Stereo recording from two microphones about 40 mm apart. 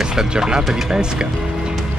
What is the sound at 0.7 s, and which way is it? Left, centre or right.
Speech, centre.